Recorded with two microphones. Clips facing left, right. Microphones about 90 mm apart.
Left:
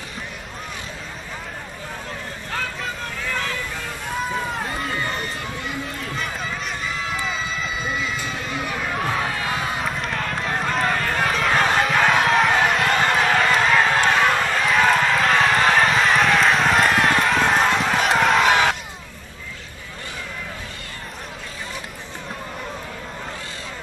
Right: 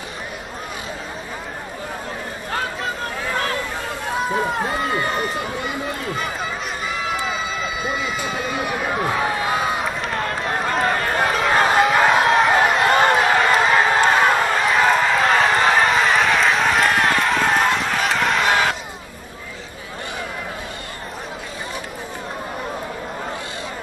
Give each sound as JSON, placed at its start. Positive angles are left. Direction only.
{"t": 4.9, "sound": "run", "side_deg": -15}
{"t": 7.8, "sound": "run", "side_deg": -15}
{"t": 9.8, "sound": "run", "side_deg": 0}
{"t": 11.0, "sound": "run", "side_deg": -20}
{"t": 11.2, "sound": "run", "side_deg": -5}